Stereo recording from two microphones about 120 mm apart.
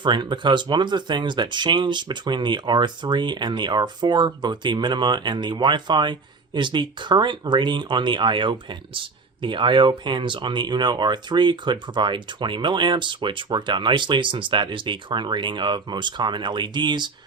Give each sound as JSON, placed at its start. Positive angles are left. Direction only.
{"t": 0.0, "sound": "speech", "side_deg": -40}